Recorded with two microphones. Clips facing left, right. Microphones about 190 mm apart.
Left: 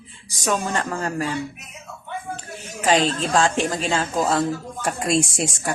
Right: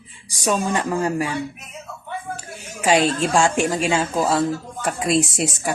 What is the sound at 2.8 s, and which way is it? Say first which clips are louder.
A man's voice: right 2 dB; 10° right (ahead or behind).